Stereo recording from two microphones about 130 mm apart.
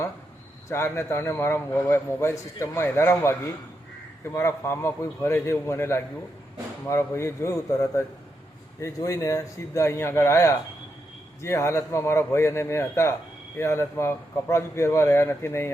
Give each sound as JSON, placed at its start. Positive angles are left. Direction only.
{"t": 0.7, "sound": "a man's voice", "side_deg": 20}